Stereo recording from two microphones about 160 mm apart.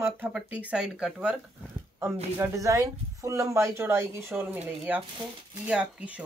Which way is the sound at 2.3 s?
15° right (ahead or behind).